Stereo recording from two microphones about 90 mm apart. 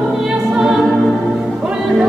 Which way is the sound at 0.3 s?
5° right (ahead or behind).